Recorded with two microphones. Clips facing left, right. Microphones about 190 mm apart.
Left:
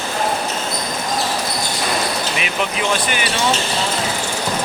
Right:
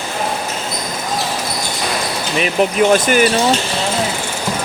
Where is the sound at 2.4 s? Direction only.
45° right (ahead or behind).